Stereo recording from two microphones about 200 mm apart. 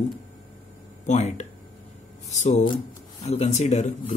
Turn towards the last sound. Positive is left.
turn(degrees=35)  # may be behind; listen again after turning